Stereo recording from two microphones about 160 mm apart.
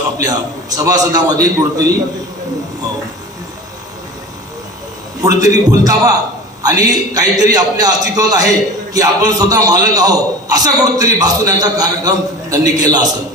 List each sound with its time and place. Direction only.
0.2 s a man's voice: 25° right (ahead or behind)
5.2 s a man's voice: 20° right (ahead or behind)